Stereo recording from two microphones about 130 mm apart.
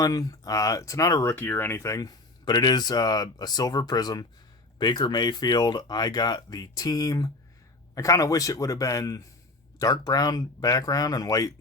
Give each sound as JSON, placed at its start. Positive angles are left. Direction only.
{"t": 0.0, "sound": "speech", "side_deg": 30}
{"t": 1.4, "sound": "speech", "side_deg": 15}